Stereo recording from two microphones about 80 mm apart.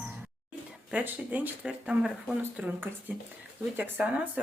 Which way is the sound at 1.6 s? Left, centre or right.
Centre.